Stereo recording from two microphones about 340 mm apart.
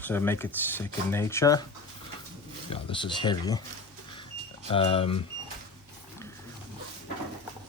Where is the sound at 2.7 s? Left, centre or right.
Centre.